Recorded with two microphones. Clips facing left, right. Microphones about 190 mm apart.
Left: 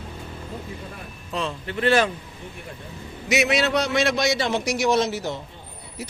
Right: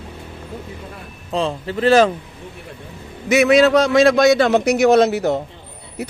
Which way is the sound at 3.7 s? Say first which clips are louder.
Right 9 dB; 90° right.